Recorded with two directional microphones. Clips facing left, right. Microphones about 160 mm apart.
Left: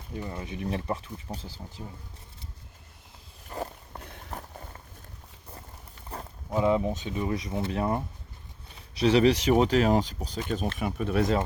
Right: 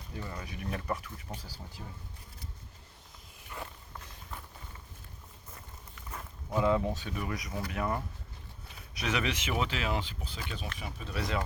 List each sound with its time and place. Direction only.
0.2 s speech: 25° left (ahead or behind)
3.5 s walk: 35° left (ahead or behind)
4.0 s walk: 60° left (ahead or behind)
4.4 s a sound: 45° left (ahead or behind)
6.1 s livestock: 30° left (ahead or behind)
6.6 s speech: 20° left (ahead or behind); by 10.4 s 40° left (ahead or behind)
10.8 s speech: 55° left (ahead or behind)